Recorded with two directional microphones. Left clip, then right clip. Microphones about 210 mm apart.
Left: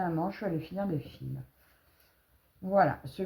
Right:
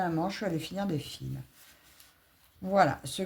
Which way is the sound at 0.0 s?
30° right (ahead or behind).